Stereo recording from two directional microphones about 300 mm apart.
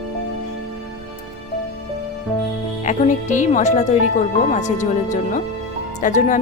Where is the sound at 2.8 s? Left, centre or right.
Left.